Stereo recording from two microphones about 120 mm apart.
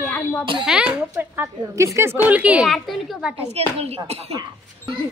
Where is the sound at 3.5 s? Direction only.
60° right (ahead or behind).